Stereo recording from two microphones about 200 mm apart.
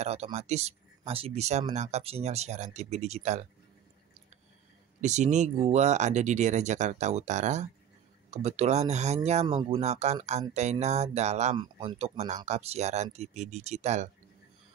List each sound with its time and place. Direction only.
0.0 s speech: 30° right (ahead or behind)
5.0 s speech: 35° right (ahead or behind)